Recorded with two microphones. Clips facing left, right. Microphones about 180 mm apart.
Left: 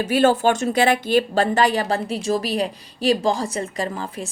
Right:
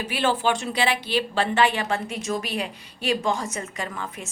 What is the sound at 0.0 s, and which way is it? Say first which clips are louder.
Speech: left 7 dB; 45° left (ahead or behind).